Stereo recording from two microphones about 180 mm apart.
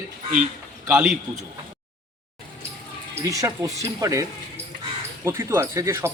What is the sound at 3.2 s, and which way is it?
Speech, 20° right (ahead or behind).